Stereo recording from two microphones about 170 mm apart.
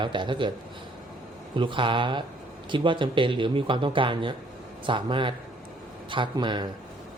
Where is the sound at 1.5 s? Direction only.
30° right (ahead or behind).